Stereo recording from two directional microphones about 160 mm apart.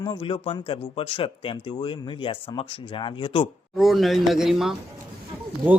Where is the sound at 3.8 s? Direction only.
Centre (ahead or behind).